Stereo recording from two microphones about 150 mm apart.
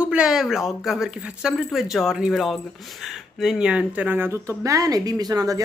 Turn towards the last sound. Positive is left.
turn(degrees=-25)  # may be behind; listen again after turning